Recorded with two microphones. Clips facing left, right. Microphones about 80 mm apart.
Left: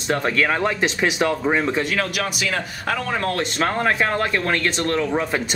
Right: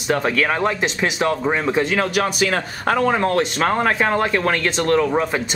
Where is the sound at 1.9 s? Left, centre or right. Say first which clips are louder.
Right 5 dB; right.